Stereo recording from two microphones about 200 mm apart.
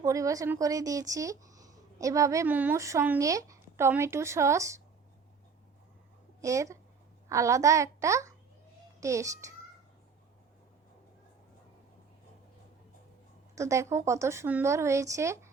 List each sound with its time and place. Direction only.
0.0 s a woman's voice: 15° right (ahead or behind)
6.4 s a woman's voice: 15° right (ahead or behind)
13.6 s a woman's voice: 15° right (ahead or behind)